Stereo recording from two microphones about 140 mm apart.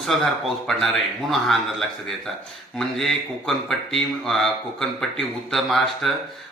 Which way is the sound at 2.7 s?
Centre (ahead or behind).